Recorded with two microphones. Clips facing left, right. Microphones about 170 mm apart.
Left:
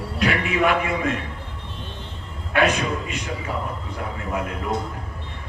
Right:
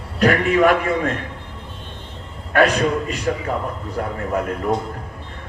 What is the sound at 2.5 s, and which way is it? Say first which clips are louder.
Speech: right 4 dB; 40° right (ahead or behind).